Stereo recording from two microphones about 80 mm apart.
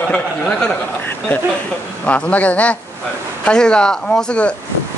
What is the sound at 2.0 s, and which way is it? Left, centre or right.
Speech, centre.